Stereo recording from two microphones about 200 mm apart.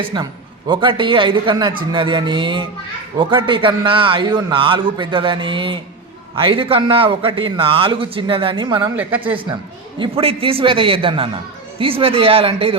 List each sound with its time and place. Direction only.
0.1 s a man's voice: 25° right (ahead or behind)